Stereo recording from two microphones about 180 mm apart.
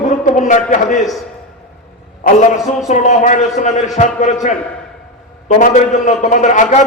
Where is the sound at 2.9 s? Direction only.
45° left (ahead or behind).